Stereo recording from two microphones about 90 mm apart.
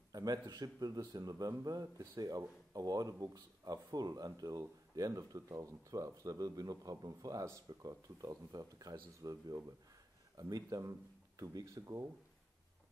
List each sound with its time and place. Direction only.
0.1 s speech: 45° right (ahead or behind)